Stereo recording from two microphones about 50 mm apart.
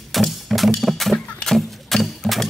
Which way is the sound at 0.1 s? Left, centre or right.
Centre.